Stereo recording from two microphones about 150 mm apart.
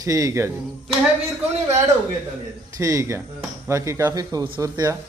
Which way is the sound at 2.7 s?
20° right (ahead or behind).